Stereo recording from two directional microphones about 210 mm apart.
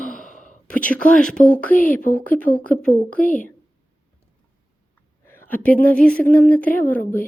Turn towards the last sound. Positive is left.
turn(degrees=10)  # may be behind; listen again after turning